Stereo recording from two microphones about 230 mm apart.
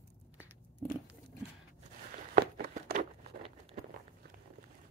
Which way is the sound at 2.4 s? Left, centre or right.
Right.